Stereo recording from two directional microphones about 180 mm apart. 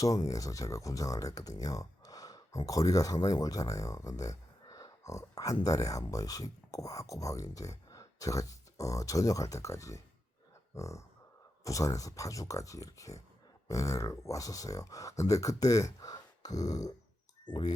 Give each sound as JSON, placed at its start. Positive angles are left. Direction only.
{"t": 0.0, "sound": "speech", "side_deg": 20}